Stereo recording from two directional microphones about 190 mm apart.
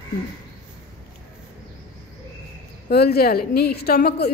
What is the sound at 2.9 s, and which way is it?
A woman's voice, 55° left (ahead or behind).